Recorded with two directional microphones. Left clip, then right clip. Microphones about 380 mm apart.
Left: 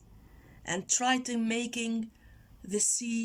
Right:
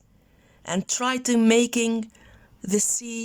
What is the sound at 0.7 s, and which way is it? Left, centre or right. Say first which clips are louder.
Speech: right 5 dB; right.